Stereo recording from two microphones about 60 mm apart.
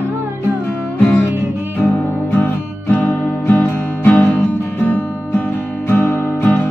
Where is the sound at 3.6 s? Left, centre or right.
Left.